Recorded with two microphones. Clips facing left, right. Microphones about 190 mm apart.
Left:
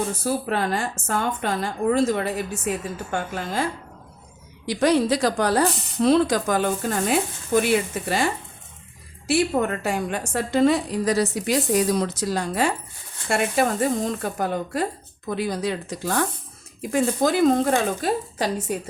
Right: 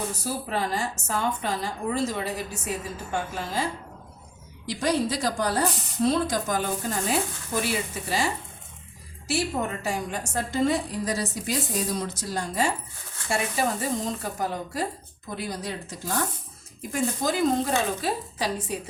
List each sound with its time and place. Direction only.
0.3 s a woman's voice: 60° left (ahead or behind)
4.6 s a woman's voice: 70° left (ahead or behind); by 14.8 s 55° left (ahead or behind)
15.4 s a woman's voice: 65° left (ahead or behind)
16.9 s a woman's voice: 60° left (ahead or behind)